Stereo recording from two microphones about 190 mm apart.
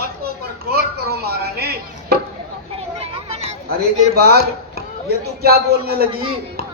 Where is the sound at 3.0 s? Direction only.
30° right (ahead or behind).